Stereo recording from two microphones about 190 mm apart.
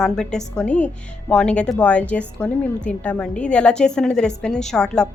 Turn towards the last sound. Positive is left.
turn(degrees=5)  # may be behind; listen again after turning